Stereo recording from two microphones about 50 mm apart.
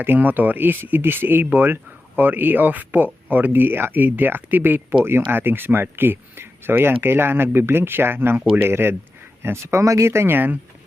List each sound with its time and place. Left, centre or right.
0.0 s speech: right
9.7 s speech: right
10.2 s speech: right